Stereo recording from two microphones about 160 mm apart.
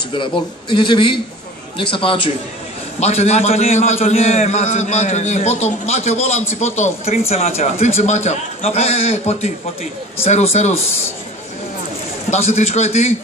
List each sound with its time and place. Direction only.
0.1 s a man's voice: 30° left (ahead or behind)
12.3 s a man's voice: 40° left (ahead or behind)